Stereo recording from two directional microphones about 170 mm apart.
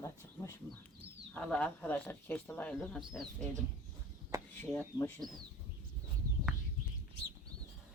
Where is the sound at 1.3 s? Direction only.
5° left (ahead or behind).